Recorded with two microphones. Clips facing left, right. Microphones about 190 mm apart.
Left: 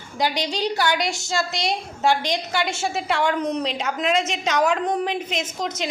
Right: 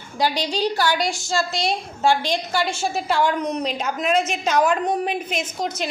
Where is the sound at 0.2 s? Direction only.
20° left (ahead or behind).